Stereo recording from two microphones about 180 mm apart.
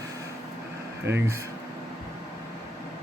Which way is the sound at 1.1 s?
15° right (ahead or behind).